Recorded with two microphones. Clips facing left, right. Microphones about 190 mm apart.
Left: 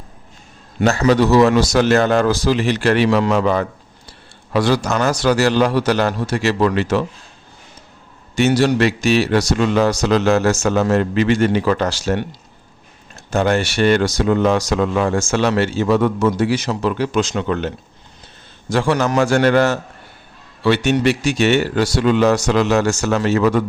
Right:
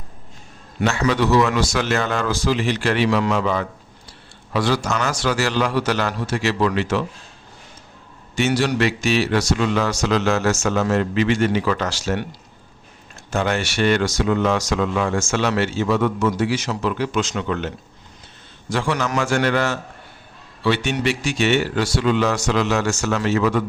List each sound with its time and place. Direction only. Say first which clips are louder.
0.9 s a man's voice: left 5 dB; 40° left (ahead or behind)
8.4 s a man's voice: left 5 dB; 35° left (ahead or behind)
13.3 s a man's voice: left 5 dB; 40° left (ahead or behind)
18.7 s a man's voice: left 5 dB; 40° left (ahead or behind)